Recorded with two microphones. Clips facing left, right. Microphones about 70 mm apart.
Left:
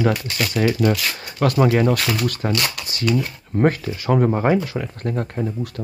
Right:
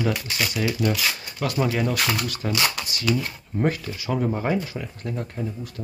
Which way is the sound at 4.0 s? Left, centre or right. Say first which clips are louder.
Left 7 dB; left.